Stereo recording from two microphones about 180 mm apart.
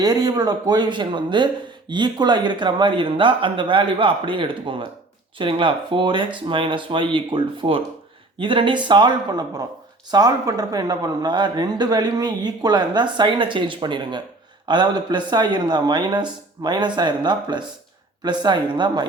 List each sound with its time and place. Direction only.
0.0 s a man's voice: 20° right (ahead or behind)